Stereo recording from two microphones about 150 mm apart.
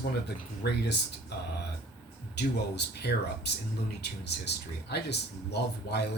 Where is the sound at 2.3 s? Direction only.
90° left.